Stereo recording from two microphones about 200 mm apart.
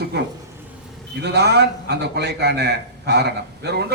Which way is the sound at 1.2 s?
55° right (ahead or behind).